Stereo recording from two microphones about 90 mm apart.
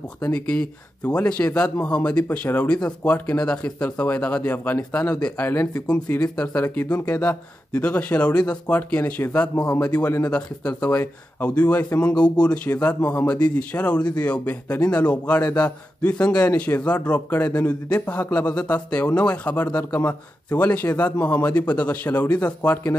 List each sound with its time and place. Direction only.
0.2 s a man's voice: 15° left (ahead or behind)